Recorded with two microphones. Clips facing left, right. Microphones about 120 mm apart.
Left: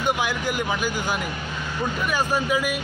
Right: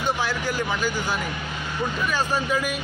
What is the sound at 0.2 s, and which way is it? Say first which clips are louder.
Speech: left 1 dB; 15° left (ahead or behind).